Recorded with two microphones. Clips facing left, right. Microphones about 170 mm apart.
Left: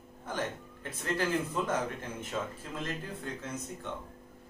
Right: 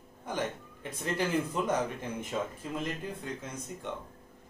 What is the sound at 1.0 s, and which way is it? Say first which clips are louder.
Speech: right 1 dB; 15° right (ahead or behind).